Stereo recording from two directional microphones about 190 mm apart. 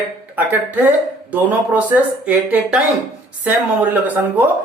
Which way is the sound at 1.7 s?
10° right (ahead or behind).